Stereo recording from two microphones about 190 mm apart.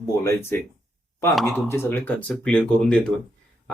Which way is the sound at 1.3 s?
Centre (ahead or behind).